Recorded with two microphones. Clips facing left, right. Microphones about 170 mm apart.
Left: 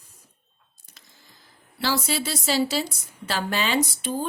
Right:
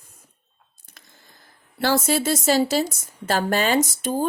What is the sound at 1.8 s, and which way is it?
A woman's voice, 50° right (ahead or behind).